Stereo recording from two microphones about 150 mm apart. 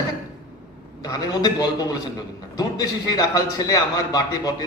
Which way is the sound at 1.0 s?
25° left (ahead or behind).